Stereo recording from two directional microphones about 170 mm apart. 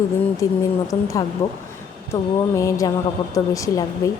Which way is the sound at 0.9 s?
20° left (ahead or behind).